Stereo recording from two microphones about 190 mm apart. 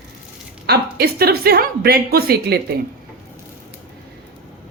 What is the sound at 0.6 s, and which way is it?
A woman's voice, 55° right (ahead or behind).